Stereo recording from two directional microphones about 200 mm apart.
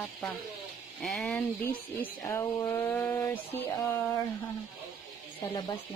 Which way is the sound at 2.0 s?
15° left (ahead or behind).